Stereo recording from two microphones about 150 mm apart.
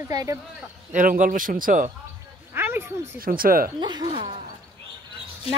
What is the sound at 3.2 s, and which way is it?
Speech, 75° right (ahead or behind).